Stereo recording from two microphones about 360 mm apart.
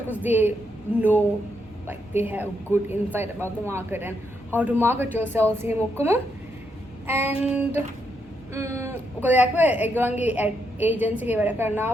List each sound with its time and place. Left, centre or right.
0.1 s a woman's voice: centre
1.9 s a woman's voice: centre